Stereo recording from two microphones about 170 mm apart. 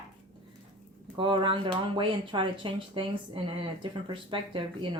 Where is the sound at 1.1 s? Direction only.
30° right (ahead or behind).